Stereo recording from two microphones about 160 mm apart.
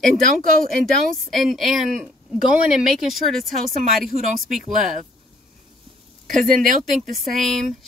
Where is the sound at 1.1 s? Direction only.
Centre (ahead or behind).